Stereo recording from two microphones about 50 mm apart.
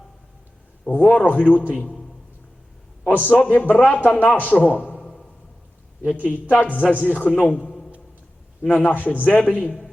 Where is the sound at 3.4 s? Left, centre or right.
Left.